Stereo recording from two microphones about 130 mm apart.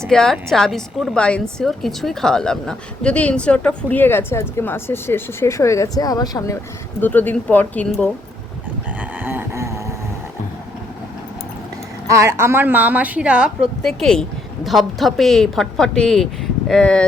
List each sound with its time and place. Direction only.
0.1 s a woman's voice: 5° left (ahead or behind); by 6.6 s 25° left (ahead or behind)
7.0 s a woman's voice: 15° left (ahead or behind)
9.2 s a sound: 15° right (ahead or behind)
12.0 s speech: 20° right (ahead or behind); by 13.7 s 5° right (ahead or behind)
13.8 s a woman's voice: 5° left (ahead or behind)